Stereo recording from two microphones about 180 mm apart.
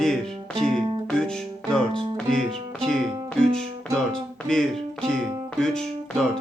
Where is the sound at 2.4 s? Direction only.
30° right (ahead or behind).